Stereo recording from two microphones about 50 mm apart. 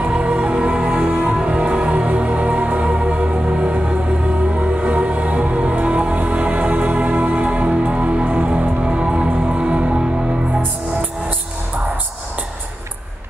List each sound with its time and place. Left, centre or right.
0.0 s music: right